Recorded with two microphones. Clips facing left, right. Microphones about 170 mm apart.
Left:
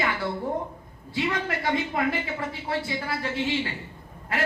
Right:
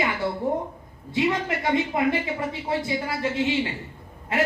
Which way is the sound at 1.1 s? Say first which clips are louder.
Right 4 dB; 25° right (ahead or behind).